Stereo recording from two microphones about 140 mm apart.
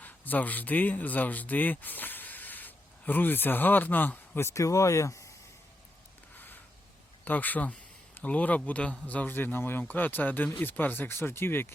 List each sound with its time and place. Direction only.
0.0 s speech: 10° left (ahead or behind)
6.3 s a sound: 15° left (ahead or behind)
7.3 s speech: 10° left (ahead or behind)